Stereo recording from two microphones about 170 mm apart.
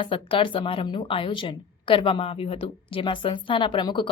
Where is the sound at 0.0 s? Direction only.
30° left (ahead or behind).